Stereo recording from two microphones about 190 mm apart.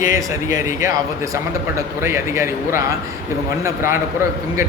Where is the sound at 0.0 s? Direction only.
15° right (ahead or behind).